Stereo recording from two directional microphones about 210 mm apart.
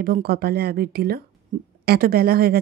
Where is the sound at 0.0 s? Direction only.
45° right (ahead or behind).